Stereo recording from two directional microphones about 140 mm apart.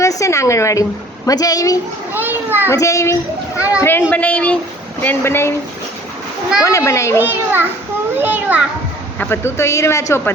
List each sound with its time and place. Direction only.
0.0 s speech: 20° left (ahead or behind)
2.1 s a child's voice: 15° right (ahead or behind)
2.6 s speech: 20° left (ahead or behind)
6.7 s speech: 20° left (ahead or behind)
7.2 s a child's voice: 15° right (ahead or behind)
9.1 s speech: 15° left (ahead or behind)